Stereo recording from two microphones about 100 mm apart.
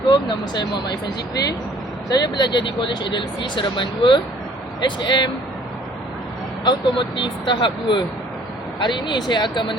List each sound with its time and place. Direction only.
0.1 s speech: 50° left (ahead or behind)
6.7 s speech: 55° left (ahead or behind)